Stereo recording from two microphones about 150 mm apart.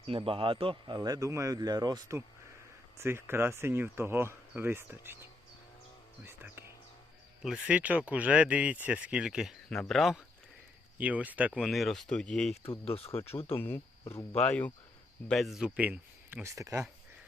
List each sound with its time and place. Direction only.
0.1 s speech: 35° right (ahead or behind); by 5.1 s 15° right (ahead or behind)
6.2 s speech: 15° right (ahead or behind); by 12.5 s 5° left (ahead or behind)
12.8 s speech: 40° left (ahead or behind)
13.6 s speech: 15° left (ahead or behind)
15.3 s speech: centre (ahead or behind); by 16.8 s 20° right (ahead or behind)